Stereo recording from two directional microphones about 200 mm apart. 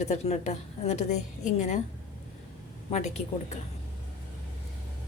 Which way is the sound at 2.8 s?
35° left (ahead or behind).